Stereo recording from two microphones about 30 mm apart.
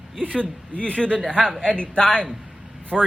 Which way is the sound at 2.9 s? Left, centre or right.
Centre.